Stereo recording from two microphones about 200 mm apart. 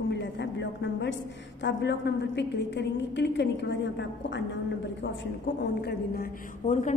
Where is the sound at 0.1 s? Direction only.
60° left (ahead or behind).